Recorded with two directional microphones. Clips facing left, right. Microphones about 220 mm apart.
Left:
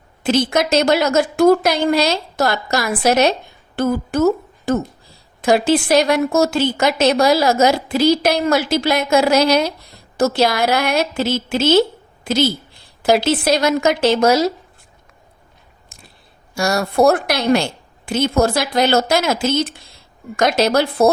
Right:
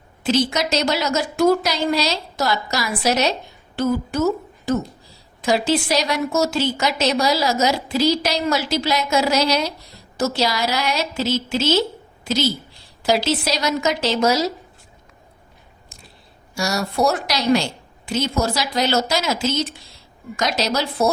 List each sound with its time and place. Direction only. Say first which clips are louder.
0.2 s a woman's voice: left 3 dB; 55° left (ahead or behind)
16.6 s a woman's voice: left 5 dB; 55° left (ahead or behind)